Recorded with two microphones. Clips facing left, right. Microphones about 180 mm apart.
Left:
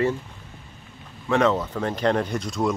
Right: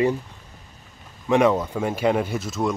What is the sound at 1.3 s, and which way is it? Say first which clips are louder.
Speech: right 2 dB; 15° right (ahead or behind).